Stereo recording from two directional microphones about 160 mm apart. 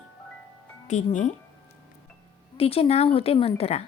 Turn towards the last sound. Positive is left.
turn(degrees=40)  # may be behind; listen again after turning